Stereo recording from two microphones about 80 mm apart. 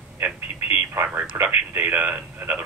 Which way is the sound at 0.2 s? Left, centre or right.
Right.